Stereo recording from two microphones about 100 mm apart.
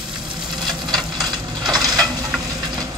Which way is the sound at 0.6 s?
45° right (ahead or behind).